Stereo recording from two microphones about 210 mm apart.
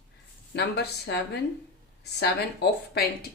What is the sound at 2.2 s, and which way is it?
Speech, 50° left (ahead or behind).